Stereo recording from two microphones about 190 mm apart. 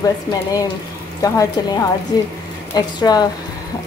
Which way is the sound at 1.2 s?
20° left (ahead or behind).